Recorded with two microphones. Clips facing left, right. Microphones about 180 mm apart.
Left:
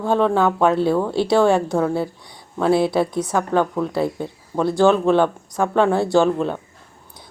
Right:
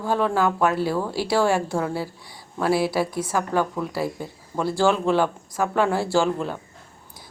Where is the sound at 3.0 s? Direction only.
20° left (ahead or behind).